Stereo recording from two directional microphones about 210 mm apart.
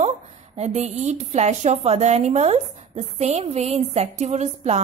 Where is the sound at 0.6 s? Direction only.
30° right (ahead or behind).